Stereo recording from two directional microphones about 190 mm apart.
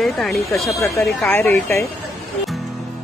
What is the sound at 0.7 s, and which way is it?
Speech, 15° left (ahead or behind).